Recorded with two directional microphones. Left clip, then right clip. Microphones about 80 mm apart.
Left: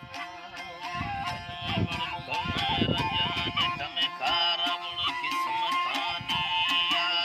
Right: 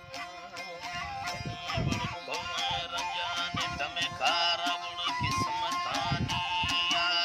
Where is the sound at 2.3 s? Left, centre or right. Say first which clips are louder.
Left 4 dB; right.